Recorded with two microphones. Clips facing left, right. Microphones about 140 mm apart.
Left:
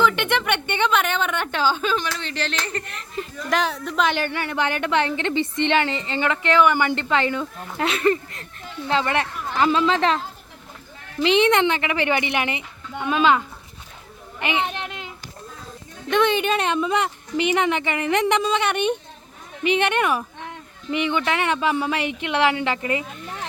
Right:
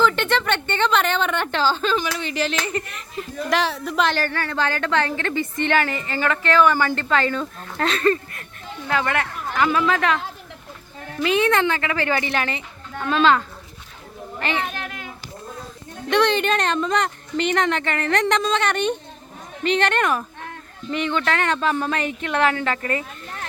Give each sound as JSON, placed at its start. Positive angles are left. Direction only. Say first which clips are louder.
{"t": 0.0, "sound": "speech", "louder": "right 1 dB", "side_deg": 15}
{"t": 2.0, "sound": "speech", "louder": "right 3 dB", "side_deg": -10}
{"t": 4.1, "sound": "a woman's voice", "louder": "even", "side_deg": 20}
{"t": 11.2, "sound": "a woman's voice", "louder": "left 2 dB", "side_deg": 25}
{"t": 14.4, "sound": "a woman's voice", "louder": "left 2 dB", "side_deg": 20}
{"t": 16.0, "sound": "speech", "louder": "right 1 dB", "side_deg": 5}